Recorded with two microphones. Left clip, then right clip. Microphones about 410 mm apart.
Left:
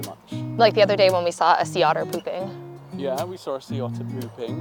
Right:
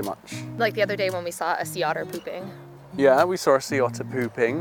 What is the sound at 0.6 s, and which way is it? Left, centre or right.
Speech, left.